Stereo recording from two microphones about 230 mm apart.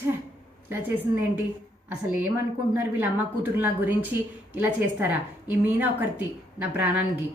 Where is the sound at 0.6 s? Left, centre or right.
Centre.